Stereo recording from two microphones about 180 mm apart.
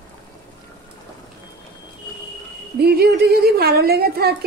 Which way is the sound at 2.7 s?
60° right (ahead or behind).